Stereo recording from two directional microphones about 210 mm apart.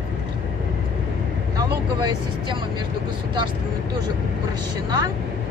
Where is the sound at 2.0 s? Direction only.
20° right (ahead or behind).